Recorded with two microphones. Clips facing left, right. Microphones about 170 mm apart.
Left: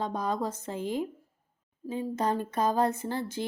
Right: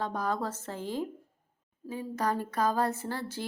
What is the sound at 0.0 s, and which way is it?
Speech, 20° left (ahead or behind).